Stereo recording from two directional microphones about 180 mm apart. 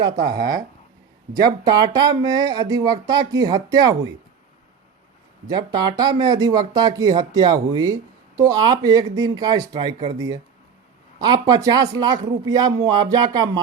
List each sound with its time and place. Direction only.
0.2 s speech: 65° right (ahead or behind)
1.6 s speech: 20° right (ahead or behind)
5.5 s speech: 25° right (ahead or behind)